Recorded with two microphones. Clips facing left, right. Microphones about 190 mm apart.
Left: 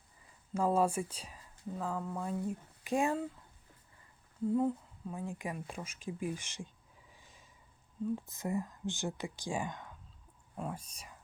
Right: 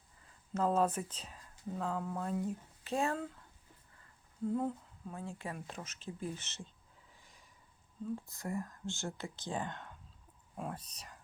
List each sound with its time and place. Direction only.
0.5 s speech: 10° left (ahead or behind)
4.5 s speech: 5° left (ahead or behind)
5.1 s speech: 15° left (ahead or behind)
7.1 s snort: 15° left (ahead or behind)
8.1 s speech: 20° left (ahead or behind)